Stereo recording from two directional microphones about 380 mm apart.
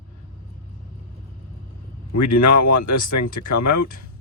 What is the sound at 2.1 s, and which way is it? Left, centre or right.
Speech, left.